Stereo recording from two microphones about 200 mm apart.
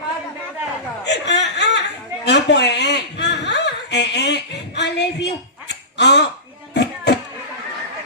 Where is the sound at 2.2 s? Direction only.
60° left (ahead or behind).